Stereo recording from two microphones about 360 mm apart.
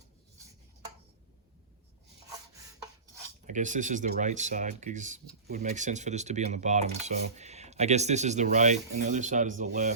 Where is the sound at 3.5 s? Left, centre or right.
Right.